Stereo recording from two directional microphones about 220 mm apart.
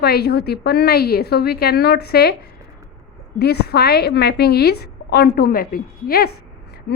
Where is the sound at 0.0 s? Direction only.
45° left (ahead or behind).